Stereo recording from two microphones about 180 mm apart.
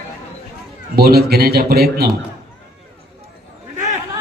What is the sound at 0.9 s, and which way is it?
A man's voice, 60° right (ahead or behind).